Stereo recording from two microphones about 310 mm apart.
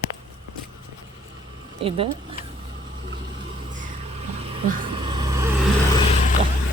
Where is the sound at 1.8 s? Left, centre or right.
Centre.